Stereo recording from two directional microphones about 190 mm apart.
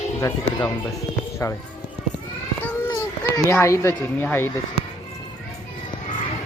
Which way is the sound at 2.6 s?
10° left (ahead or behind).